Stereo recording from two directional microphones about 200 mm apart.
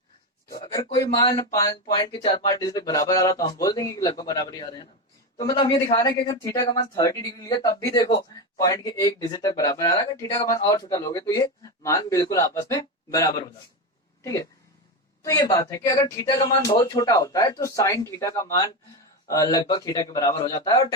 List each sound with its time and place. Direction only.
0.6 s a man's voice: 20° left (ahead or behind)
15.2 s a woman's voice: 15° left (ahead or behind)